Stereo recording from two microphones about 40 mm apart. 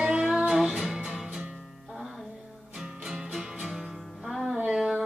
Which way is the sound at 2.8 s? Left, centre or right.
Centre.